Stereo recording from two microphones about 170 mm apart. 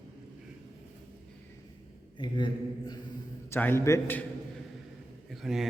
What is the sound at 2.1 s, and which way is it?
Speech, 25° left (ahead or behind).